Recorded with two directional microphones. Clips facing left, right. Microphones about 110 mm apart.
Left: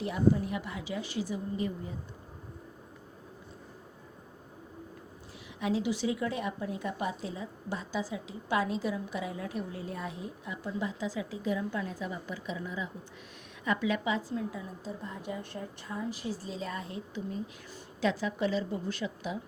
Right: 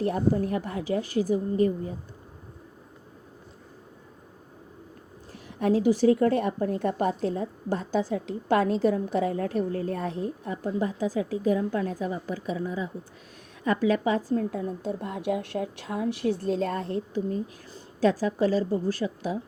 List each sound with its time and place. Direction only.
0.0 s a woman's voice: 50° right (ahead or behind)
5.5 s a woman's voice: 50° right (ahead or behind)
14.3 s a woman's voice: 50° right (ahead or behind)
18.2 s a woman's voice: 40° right (ahead or behind)